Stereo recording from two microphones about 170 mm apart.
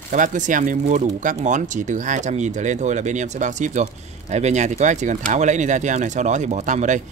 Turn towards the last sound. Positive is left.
turn(degrees=-45)  # may be behind; listen again after turning